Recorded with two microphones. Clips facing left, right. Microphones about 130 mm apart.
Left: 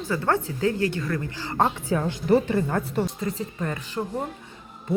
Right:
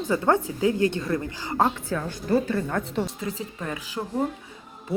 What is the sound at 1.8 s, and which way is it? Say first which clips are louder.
Speech: left 5 dB; 15° left (ahead or behind).